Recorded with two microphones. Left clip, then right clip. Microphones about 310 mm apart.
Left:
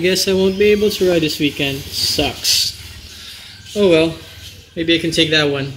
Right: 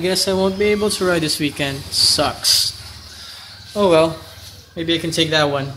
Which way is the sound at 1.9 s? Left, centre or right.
Centre.